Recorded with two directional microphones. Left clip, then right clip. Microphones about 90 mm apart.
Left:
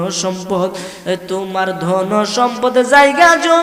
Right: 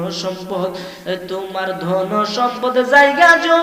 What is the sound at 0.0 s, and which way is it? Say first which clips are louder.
A man's voice: left 4 dB; 40° left (ahead or behind).